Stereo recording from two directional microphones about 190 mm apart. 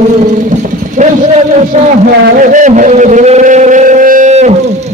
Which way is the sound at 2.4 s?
40° right (ahead or behind).